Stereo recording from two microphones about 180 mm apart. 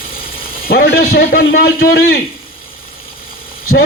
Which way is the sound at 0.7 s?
60° left (ahead or behind).